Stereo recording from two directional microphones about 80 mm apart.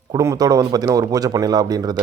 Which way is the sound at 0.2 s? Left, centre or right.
Right.